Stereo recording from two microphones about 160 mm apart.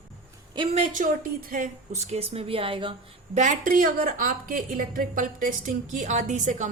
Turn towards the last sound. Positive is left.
turn(degrees=-50)  # may be behind; listen again after turning